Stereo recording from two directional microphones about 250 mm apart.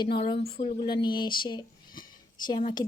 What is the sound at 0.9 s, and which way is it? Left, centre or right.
A woman's voice, centre.